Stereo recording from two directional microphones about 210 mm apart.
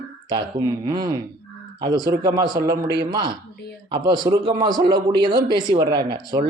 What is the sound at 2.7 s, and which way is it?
Speech, 50° right (ahead or behind).